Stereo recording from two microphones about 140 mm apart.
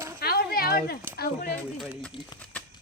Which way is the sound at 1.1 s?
90° left.